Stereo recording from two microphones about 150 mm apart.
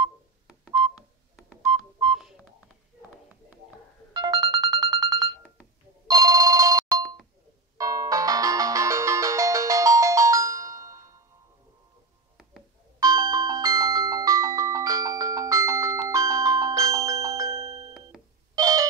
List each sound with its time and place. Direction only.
2.1 s telephone dialing: centre (ahead or behind)
4.1 s music: 25° right (ahead or behind)
6.0 s telephone bell ringing: 25° right (ahead or behind)
7.7 s music: 25° right (ahead or behind)
13.0 s music: 25° right (ahead or behind)
18.5 s telephone dialing: 25° right (ahead or behind)